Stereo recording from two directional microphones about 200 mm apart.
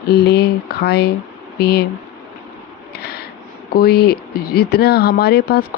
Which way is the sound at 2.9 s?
55° left (ahead or behind).